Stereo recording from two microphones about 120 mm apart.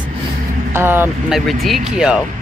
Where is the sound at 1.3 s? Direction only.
Centre (ahead or behind).